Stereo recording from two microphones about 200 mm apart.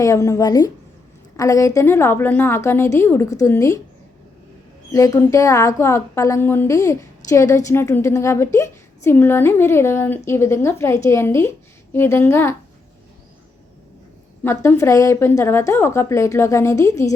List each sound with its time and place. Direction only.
0.0 s a woman's voice: 15° left (ahead or behind)
4.9 s a woman's voice: 15° left (ahead or behind)
14.4 s a woman's voice: 10° left (ahead or behind)